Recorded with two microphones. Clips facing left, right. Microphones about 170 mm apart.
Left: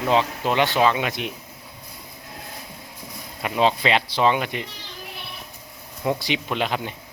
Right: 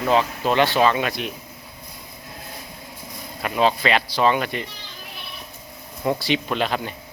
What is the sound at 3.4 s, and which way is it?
Speech, 20° left (ahead or behind).